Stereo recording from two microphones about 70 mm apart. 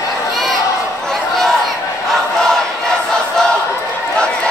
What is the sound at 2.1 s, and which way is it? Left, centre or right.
Battle cry, centre.